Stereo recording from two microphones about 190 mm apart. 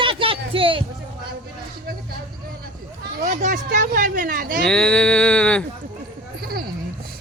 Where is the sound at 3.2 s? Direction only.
40° right (ahead or behind).